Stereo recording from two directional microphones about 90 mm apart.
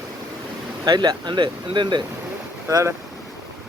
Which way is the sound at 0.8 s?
50° right (ahead or behind).